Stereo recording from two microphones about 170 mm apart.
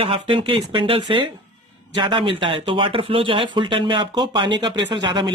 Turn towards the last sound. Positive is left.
turn(degrees=-25)  # may be behind; listen again after turning